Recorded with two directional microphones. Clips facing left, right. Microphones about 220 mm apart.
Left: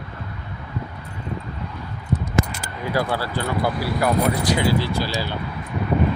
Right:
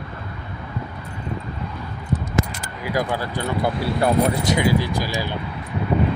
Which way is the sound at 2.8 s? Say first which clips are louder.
Even; 15° right (ahead or behind).